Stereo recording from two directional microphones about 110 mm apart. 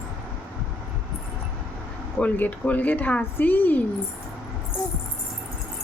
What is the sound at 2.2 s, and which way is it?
A woman's voice, 15° left (ahead or behind).